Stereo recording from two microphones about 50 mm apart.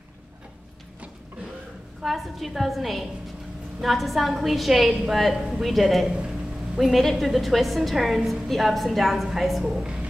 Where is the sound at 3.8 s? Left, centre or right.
Centre.